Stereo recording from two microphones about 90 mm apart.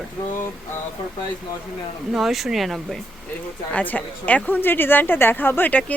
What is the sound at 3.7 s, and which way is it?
A woman's voice, 15° left (ahead or behind).